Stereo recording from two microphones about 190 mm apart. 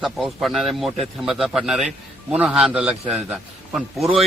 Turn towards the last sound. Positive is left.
turn(degrees=0)  # may be behind; listen again after turning